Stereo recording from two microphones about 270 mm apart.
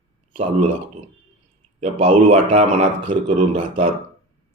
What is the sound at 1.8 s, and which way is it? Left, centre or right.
Speech, right.